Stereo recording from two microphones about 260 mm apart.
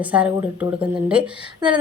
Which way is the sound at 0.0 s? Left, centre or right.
Centre.